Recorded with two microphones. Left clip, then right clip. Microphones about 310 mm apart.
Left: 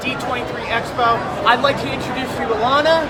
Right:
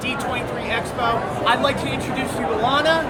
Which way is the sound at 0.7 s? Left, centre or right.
Centre.